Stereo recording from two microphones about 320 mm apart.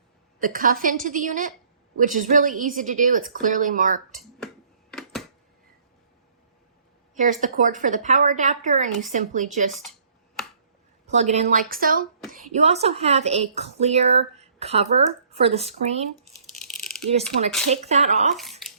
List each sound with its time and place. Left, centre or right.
0.4 s a woman's voice: right
4.9 s a sound: centre
7.2 s a woman's voice: right
11.0 s a woman's voice: right
17.7 s a woman's voice: right
18.6 s bathtub: centre